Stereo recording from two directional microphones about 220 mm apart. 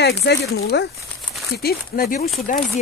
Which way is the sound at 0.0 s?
50° left (ahead or behind).